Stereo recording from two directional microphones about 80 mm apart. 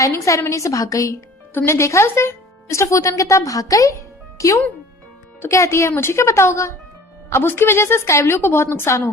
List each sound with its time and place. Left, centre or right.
0.0 s a woman's voice: left
1.5 s a woman's voice: left